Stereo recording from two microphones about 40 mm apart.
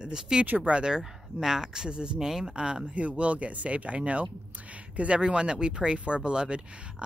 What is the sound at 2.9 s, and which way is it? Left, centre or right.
Speech, right.